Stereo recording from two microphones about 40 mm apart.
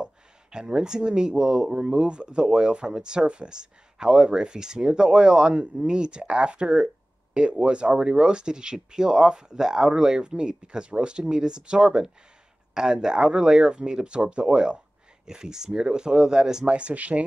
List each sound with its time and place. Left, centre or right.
0.0 s speech: centre
15.2 s speech: centre
16.6 s speech: right